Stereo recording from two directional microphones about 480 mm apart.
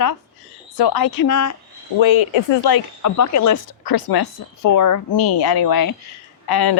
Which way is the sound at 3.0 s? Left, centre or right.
Left.